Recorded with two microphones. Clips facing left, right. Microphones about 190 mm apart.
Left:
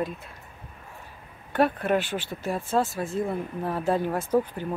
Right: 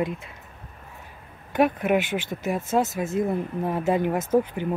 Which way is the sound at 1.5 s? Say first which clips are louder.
Right 2 dB; 15° right (ahead or behind).